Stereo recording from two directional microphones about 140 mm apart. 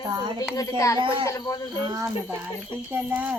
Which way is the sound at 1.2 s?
25° left (ahead or behind).